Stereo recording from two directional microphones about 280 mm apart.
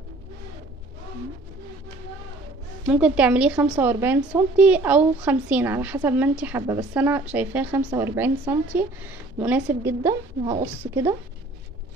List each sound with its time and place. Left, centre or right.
2.9 s a woman's voice: centre